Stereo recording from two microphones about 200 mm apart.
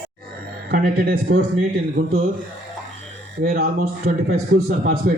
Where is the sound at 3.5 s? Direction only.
45° right (ahead or behind).